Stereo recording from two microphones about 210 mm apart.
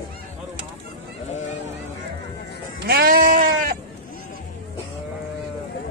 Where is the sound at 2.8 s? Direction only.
45° right (ahead or behind).